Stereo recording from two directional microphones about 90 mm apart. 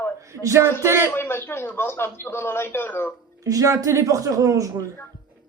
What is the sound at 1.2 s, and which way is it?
Speech, 25° left (ahead or behind).